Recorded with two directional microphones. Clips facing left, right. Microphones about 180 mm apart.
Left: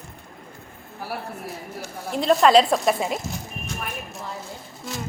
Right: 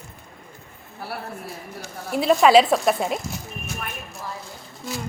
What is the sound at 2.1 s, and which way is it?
A woman's voice, 5° right (ahead or behind).